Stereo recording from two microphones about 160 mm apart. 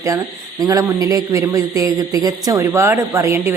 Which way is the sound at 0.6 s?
20° right (ahead or behind).